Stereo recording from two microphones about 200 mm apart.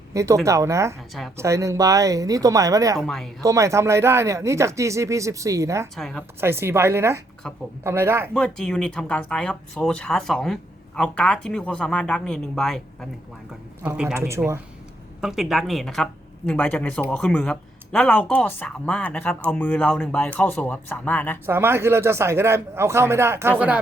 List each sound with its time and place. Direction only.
0.1 s speech: 15° right (ahead or behind)
3.0 s speech: centre (ahead or behind)
3.4 s speech: 15° right (ahead or behind)
6.0 s speech: centre (ahead or behind)
6.4 s speech: 10° right (ahead or behind)
7.4 s speech: 5° left (ahead or behind)
7.9 s speech: 15° right (ahead or behind)
8.3 s speech: 5° left (ahead or behind); by 14.6 s 15° right (ahead or behind)
15.2 s speech: centre (ahead or behind)
21.4 s speech: 10° right (ahead or behind)